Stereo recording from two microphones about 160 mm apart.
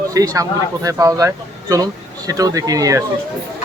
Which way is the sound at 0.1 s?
20° right (ahead or behind).